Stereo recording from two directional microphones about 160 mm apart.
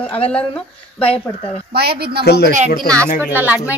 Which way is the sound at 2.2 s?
90° left.